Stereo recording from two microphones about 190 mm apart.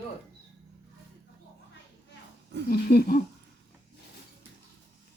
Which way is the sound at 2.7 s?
55° left (ahead or behind).